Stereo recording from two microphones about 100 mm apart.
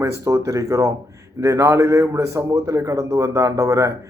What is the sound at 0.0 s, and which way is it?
A man's voice, 30° right (ahead or behind).